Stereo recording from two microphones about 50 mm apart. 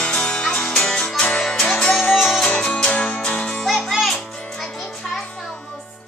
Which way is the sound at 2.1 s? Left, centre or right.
Centre.